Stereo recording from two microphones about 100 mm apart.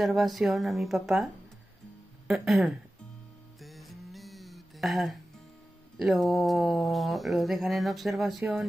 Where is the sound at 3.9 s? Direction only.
Centre (ahead or behind).